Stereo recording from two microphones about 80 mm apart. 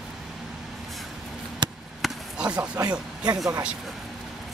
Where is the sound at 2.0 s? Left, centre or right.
Centre.